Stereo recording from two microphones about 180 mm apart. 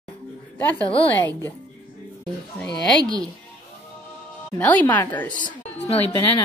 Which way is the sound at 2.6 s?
5° left (ahead or behind).